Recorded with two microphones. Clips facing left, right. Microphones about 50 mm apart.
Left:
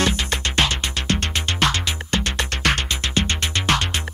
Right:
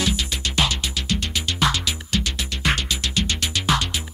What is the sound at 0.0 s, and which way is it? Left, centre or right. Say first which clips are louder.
Music: left 3 dB; left.